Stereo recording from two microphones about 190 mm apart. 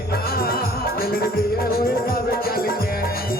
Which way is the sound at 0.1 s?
50° left (ahead or behind).